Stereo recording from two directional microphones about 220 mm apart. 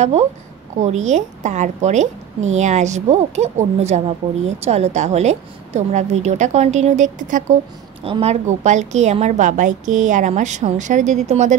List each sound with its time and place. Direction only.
0.0 s a woman's voice: 30° right (ahead or behind)